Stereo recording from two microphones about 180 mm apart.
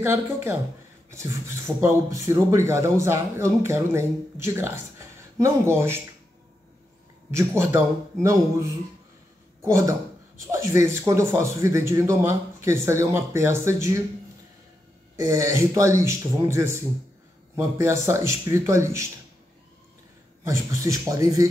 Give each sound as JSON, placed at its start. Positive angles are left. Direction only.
{"t": 0.0, "sound": "speech", "side_deg": -15}
{"t": 7.3, "sound": "speech", "side_deg": -15}
{"t": 15.1, "sound": "speech", "side_deg": -15}
{"t": 20.4, "sound": "speech", "side_deg": -15}